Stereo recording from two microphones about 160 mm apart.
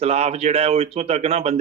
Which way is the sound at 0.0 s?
40° right (ahead or behind).